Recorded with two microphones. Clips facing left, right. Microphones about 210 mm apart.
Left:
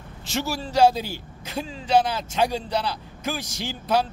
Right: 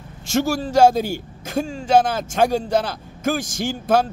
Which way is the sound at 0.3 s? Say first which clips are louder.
Right 8 dB; 50° right (ahead or behind).